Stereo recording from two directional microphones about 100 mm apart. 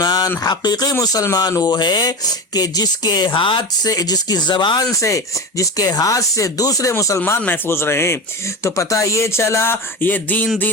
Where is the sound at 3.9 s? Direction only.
40° left (ahead or behind).